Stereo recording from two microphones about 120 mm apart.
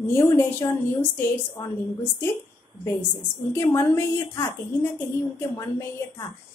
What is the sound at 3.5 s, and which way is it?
Speech, 25° left (ahead or behind).